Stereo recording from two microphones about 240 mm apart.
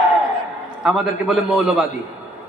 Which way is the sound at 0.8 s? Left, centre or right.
Centre.